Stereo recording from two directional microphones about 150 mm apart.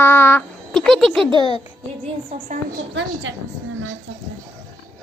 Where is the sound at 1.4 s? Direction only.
35° left (ahead or behind).